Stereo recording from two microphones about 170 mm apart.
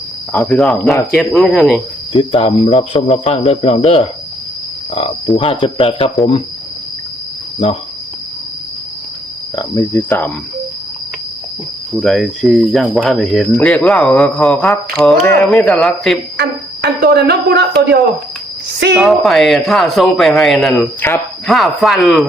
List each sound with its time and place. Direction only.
0.3 s speech: 5° left (ahead or behind)
2.1 s speech: 30° left (ahead or behind)
7.6 s speech: 35° left (ahead or behind)
9.6 s speech: 25° left (ahead or behind)
11.9 s speech: centre (ahead or behind)
16.4 s cricket: 70° right (ahead or behind)
18.9 s speech: centre (ahead or behind)
21.0 s speech: 10° left (ahead or behind)
21.4 s speech: centre (ahead or behind)